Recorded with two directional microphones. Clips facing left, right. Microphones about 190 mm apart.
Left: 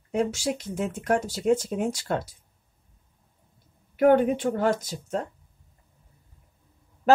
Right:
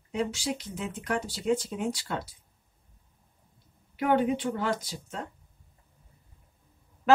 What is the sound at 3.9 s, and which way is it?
Speech, 50° left (ahead or behind).